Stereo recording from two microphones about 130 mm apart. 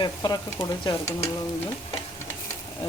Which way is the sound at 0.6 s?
45° left (ahead or behind).